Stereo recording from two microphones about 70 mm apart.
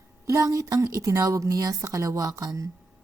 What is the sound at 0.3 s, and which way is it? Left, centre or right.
A woman's voice, right.